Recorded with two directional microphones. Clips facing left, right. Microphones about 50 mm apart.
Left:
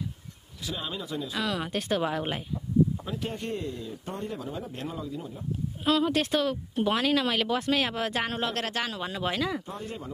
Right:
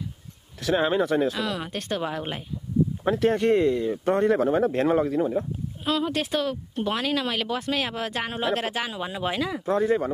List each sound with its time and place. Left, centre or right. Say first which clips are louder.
0.6 s speech: right 13 dB; right
1.3 s speech: right 1 dB; centre
3.1 s speech: right 13 dB; right
5.9 s speech: left 1 dB; centre
9.7 s speech: right 15 dB; right